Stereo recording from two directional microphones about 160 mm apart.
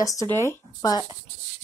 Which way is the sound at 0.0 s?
20° left (ahead or behind).